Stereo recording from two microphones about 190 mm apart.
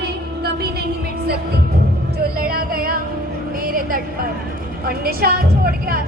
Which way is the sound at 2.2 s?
50° right (ahead or behind).